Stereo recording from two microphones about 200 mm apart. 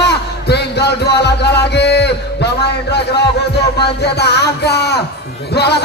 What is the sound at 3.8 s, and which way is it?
Speech, 55° left (ahead or behind).